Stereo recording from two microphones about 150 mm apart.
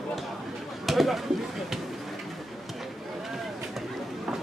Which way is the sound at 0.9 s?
Centre (ahead or behind).